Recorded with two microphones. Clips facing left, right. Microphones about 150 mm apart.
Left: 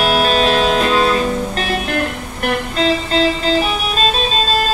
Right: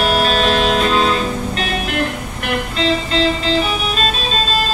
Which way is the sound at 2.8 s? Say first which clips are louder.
Left 1 dB; 40° left (ahead or behind).